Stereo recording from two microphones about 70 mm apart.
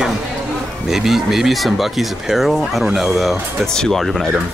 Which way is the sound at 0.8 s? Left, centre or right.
Centre.